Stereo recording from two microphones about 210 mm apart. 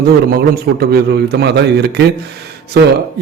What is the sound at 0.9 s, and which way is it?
Speech, 50° right (ahead or behind).